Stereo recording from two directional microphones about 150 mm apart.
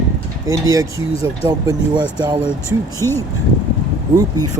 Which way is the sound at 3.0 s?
15° left (ahead or behind).